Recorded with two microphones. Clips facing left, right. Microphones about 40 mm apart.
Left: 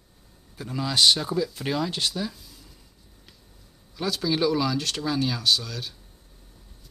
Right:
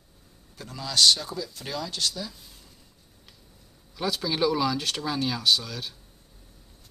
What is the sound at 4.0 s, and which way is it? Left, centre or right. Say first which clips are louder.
Speech: left 1 dB; centre.